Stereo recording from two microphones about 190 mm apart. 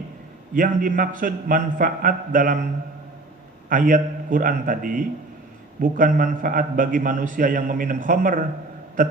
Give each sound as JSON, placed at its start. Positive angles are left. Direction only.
{"t": 0.5, "sound": "a man's voice", "side_deg": -45}
{"t": 3.7, "sound": "a man's voice", "side_deg": -45}